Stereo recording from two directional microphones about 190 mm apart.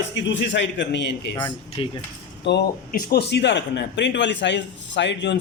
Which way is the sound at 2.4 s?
55° left (ahead or behind).